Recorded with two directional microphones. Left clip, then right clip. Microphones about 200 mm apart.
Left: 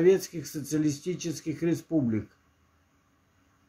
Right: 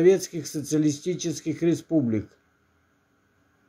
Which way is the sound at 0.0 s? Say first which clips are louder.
Right 3 dB; 15° right (ahead or behind).